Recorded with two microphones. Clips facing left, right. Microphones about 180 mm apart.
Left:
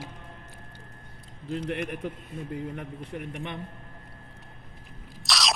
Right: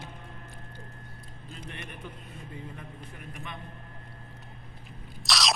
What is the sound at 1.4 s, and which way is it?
A man's voice, 90° left.